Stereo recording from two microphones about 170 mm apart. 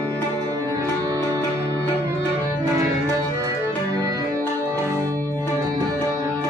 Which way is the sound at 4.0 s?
20° right (ahead or behind).